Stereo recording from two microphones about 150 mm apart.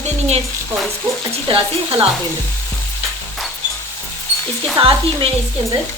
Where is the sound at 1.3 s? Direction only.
35° right (ahead or behind).